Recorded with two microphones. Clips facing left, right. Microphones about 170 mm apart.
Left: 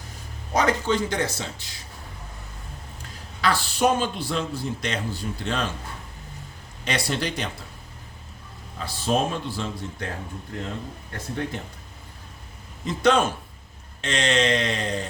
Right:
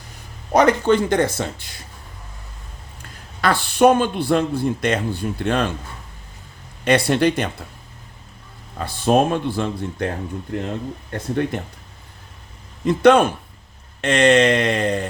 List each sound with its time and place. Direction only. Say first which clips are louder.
0.5 s a man's voice: right 7 dB; 60° right (ahead or behind)
3.4 s a man's voice: right 7 dB; 60° right (ahead or behind)
6.8 s a man's voice: right 10 dB; 55° right (ahead or behind)
8.8 s a man's voice: right 7 dB; 60° right (ahead or behind)
11.1 s a man's voice: right 8 dB; 60° right (ahead or behind)
12.8 s a man's voice: right 7 dB; 60° right (ahead or behind)